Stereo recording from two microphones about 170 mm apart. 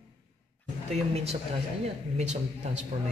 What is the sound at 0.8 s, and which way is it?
Speech, 40° right (ahead or behind).